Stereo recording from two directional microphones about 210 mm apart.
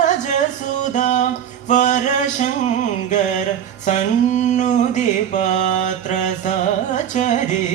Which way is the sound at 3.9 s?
35° left (ahead or behind).